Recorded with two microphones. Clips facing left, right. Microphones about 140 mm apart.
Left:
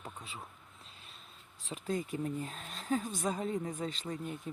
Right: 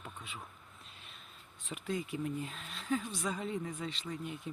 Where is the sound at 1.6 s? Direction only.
35° left (ahead or behind).